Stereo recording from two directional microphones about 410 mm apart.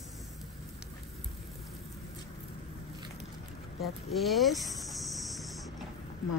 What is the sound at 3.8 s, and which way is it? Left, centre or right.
Cricket, centre.